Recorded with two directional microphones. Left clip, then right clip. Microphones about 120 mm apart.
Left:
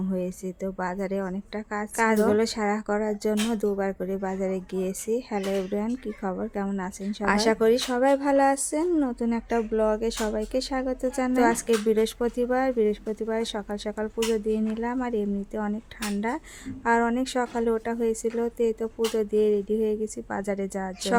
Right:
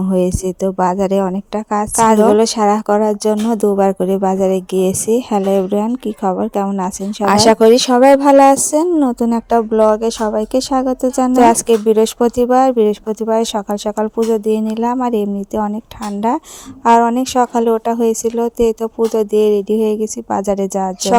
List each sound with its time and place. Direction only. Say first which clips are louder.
0.1 s a woman's voice: right 18 dB; 70° right (ahead or behind)
7.3 s speech: right 13 dB; 90° right; by 8.9 s 75° right (ahead or behind)
8.9 s a woman's voice: right 11 dB; 55° right (ahead or behind)
16.8 s a woman's voice: right 13 dB; 55° right (ahead or behind)